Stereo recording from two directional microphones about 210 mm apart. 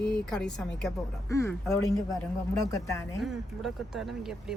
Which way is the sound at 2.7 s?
15° left (ahead or behind).